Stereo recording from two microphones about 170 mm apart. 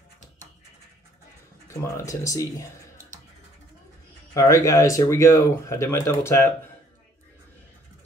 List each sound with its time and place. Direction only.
1.7 s speech: 15° left (ahead or behind)
4.3 s speech: 15° left (ahead or behind)